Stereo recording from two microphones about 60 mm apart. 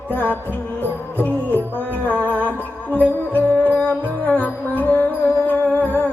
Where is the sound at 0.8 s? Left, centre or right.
Left.